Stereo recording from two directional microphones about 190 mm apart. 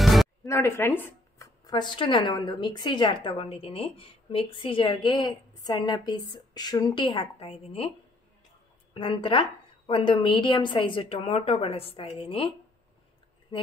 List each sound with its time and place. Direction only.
0.0 s music: centre (ahead or behind)
0.5 s speech: 10° left (ahead or behind)
1.7 s speech: 25° left (ahead or behind)
8.9 s speech: 30° left (ahead or behind)